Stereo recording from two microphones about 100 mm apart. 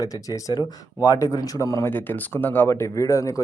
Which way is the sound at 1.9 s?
20° left (ahead or behind).